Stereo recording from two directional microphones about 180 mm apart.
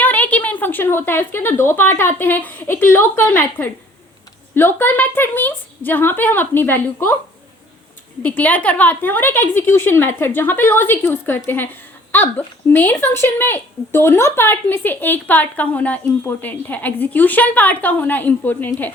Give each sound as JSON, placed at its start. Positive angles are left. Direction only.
{"t": 0.0, "sound": "a woman's voice", "side_deg": 10}
{"t": 8.2, "sound": "a woman's voice", "side_deg": 10}